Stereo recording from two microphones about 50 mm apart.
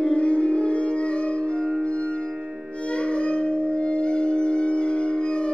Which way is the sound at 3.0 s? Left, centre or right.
Left.